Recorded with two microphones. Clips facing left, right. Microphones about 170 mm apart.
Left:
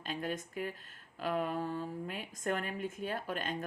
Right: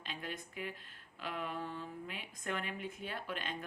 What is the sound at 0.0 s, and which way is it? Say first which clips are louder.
A woman's voice: left 7 dB; 45° left (ahead or behind).